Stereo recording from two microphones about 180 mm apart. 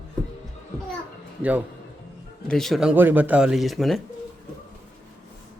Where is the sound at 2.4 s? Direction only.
Centre (ahead or behind).